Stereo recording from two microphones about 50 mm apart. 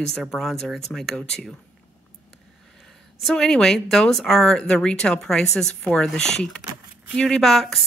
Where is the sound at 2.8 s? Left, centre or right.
Centre.